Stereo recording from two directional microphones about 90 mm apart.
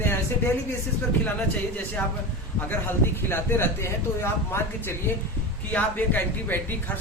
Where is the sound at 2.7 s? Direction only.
25° left (ahead or behind).